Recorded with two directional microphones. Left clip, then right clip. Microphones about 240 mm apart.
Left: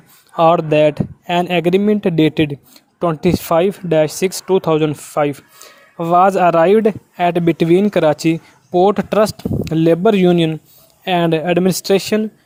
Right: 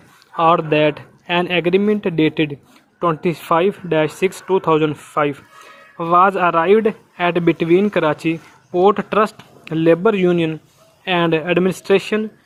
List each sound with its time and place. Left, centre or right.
0.3 s speech: left